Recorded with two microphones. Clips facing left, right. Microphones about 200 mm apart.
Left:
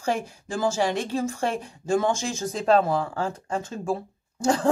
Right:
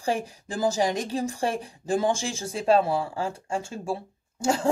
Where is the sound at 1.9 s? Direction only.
30° right (ahead or behind).